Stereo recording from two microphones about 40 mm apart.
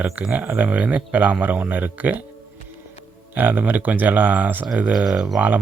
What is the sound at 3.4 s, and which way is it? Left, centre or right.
Speech, right.